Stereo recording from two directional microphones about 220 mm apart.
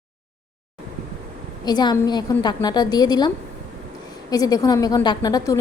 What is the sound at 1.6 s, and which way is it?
A woman's voice, 20° left (ahead or behind).